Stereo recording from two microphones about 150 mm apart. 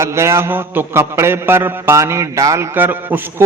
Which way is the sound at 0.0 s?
20° right (ahead or behind).